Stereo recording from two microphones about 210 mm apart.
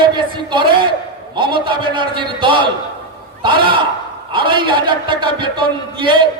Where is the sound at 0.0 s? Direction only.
20° right (ahead or behind).